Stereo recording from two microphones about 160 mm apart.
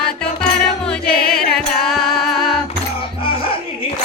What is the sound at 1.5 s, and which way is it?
Music, centre (ahead or behind).